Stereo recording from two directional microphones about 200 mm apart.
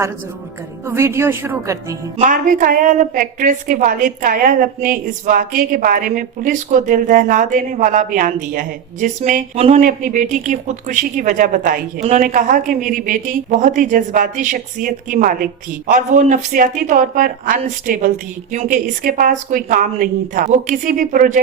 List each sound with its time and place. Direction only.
0.9 s a woman's voice: 15° right (ahead or behind)
2.1 s a woman's voice: 40° right (ahead or behind)